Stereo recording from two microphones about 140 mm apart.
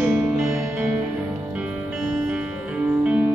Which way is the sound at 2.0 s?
5° right (ahead or behind).